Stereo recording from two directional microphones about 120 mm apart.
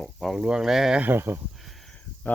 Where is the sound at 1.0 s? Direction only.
20° right (ahead or behind).